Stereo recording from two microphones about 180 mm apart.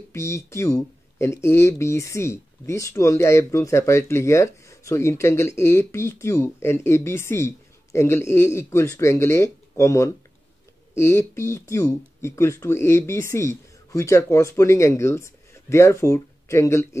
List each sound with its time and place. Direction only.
0.1 s speech: 15° left (ahead or behind)